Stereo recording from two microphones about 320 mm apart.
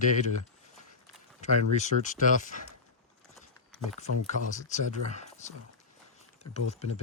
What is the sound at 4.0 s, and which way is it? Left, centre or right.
Speech, left.